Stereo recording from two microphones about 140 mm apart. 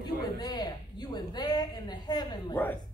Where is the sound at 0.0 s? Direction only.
30° left (ahead or behind).